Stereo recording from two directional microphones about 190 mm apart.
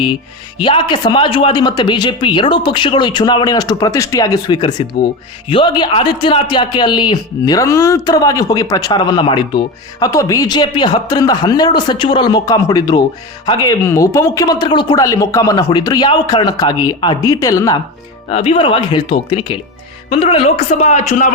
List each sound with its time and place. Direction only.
0.6 s speech: 25° left (ahead or behind)
18.3 s a man's voice: 30° left (ahead or behind)